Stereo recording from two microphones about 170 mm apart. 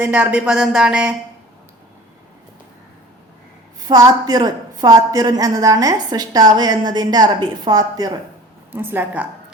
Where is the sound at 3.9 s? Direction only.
20° right (ahead or behind).